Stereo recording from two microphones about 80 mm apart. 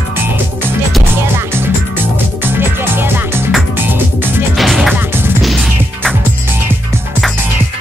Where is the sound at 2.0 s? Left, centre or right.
Right.